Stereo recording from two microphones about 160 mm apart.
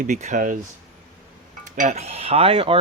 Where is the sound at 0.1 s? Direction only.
45° right (ahead or behind).